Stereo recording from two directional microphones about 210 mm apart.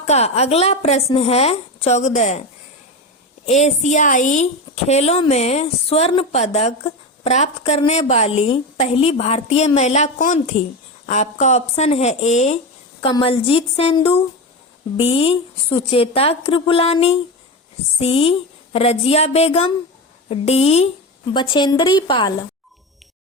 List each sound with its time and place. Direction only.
0.0 s a woman's voice: 30° left (ahead or behind)
3.4 s a woman's voice: 30° left (ahead or behind)